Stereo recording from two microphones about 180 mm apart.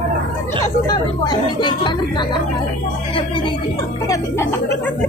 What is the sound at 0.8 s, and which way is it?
Speech, 25° left (ahead or behind).